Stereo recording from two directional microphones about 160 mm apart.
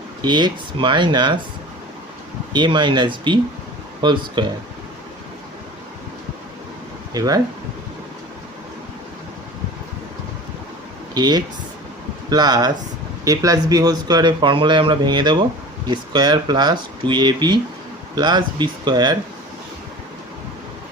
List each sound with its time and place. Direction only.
0.2 s speech: 25° right (ahead or behind)
2.5 s speech: 30° right (ahead or behind)
7.1 s speech: 25° right (ahead or behind)
11.1 s speech: 25° right (ahead or behind)